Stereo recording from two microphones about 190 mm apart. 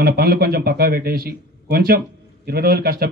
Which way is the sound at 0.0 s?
55° right (ahead or behind).